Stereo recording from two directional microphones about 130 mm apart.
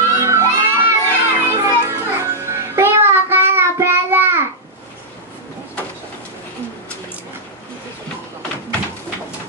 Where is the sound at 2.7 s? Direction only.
20° right (ahead or behind).